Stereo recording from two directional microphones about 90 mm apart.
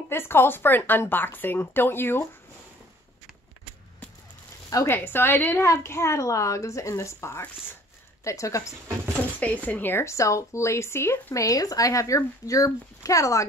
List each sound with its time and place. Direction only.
0.1 s speech: 25° left (ahead or behind)
4.8 s a woman's voice: 25° left (ahead or behind)
9.4 s a woman's voice: 15° left (ahead or behind); by 13.5 s 35° left (ahead or behind)